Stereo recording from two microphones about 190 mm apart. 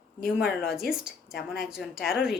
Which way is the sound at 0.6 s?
Centre (ahead or behind).